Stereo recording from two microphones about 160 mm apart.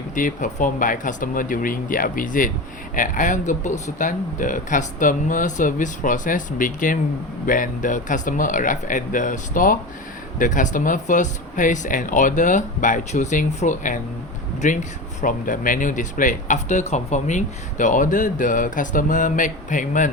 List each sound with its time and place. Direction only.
0.1 s speech: 55° left (ahead or behind)